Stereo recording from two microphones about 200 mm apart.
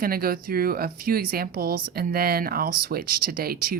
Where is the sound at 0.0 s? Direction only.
50° right (ahead or behind).